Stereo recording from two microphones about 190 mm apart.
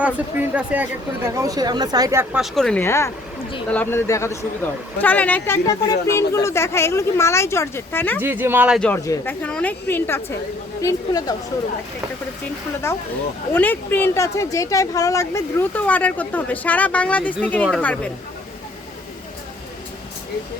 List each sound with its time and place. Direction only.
0.0 s speech: 10° right (ahead or behind)
2.3 s a woman's voice: centre (ahead or behind)
2.8 s a woman's voice: 15° left (ahead or behind)
8.2 s speech: 10° right (ahead or behind)
8.8 s a woman's voice: 10° left (ahead or behind)
12.9 s a woman's voice: 15° left (ahead or behind)